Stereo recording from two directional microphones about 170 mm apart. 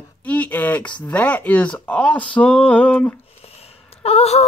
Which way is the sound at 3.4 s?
35° left (ahead or behind).